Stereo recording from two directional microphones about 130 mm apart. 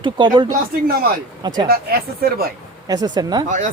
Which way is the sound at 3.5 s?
70° right (ahead or behind).